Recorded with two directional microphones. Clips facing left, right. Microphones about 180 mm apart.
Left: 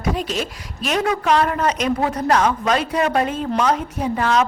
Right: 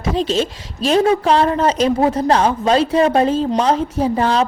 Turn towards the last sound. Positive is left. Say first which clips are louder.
# right 3 dB
turn(degrees=-30)  # may be behind; listen again after turning